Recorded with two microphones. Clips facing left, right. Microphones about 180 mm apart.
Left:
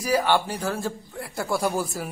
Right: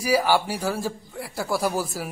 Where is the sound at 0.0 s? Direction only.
10° right (ahead or behind).